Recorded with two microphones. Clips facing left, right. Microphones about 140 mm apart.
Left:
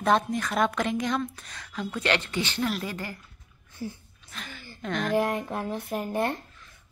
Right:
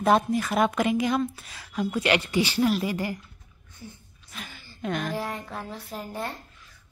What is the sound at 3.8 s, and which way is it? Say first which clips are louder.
Speech: left 9 dB; 75° left (ahead or behind).